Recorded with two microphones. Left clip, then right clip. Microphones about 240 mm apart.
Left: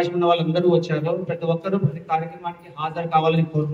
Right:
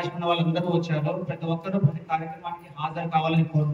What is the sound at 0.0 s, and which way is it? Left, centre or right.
A man's voice, centre.